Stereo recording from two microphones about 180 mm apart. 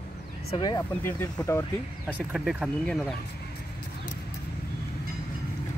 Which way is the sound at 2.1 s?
5° right (ahead or behind).